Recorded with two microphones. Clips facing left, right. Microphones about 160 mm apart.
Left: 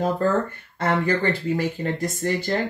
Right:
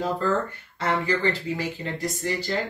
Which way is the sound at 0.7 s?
50° left (ahead or behind).